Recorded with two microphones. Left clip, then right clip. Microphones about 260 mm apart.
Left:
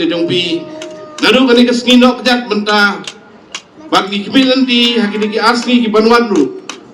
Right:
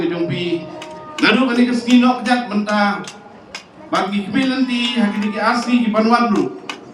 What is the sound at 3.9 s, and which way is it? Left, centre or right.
A man's voice, left.